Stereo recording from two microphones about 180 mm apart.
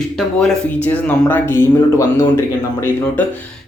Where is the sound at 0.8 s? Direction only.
10° left (ahead or behind).